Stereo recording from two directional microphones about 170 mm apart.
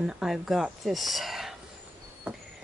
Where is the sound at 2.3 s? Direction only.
10° right (ahead or behind).